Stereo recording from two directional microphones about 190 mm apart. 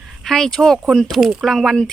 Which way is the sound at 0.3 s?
Centre (ahead or behind).